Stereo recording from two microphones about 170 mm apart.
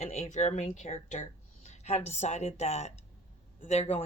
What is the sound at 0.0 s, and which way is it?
A woman's voice, 40° left (ahead or behind).